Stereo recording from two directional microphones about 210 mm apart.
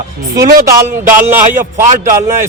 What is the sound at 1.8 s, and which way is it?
Speech, 35° right (ahead or behind).